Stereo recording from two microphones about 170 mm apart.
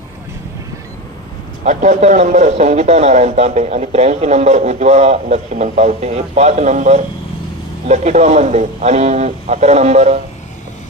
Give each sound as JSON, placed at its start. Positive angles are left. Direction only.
{"t": 1.6, "sound": "a man's voice", "side_deg": -45}